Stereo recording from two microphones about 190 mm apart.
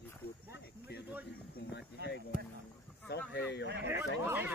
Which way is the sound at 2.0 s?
60° right (ahead or behind).